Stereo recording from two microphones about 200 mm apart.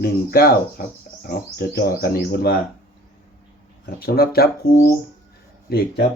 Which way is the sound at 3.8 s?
50° left (ahead or behind).